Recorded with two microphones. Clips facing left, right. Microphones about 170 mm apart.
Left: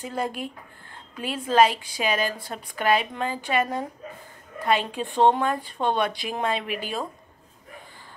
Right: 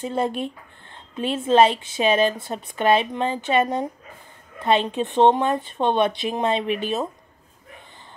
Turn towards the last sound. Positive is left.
turn(degrees=-25)  # may be behind; listen again after turning